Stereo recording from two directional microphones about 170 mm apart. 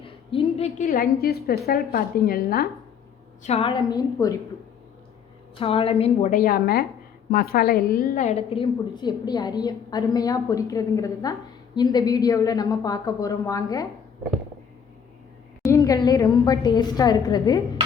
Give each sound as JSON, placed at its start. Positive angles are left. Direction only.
{"t": 0.0, "sound": "a sound", "side_deg": 30}
{"t": 0.9, "sound": "a woman's voice", "side_deg": 65}
{"t": 3.4, "sound": "a woman's voice", "side_deg": 35}
{"t": 5.5, "sound": "a woman's voice", "side_deg": 35}
{"t": 6.3, "sound": "a woman's voice", "side_deg": 60}
{"t": 15.6, "sound": "a woman's voice", "side_deg": 20}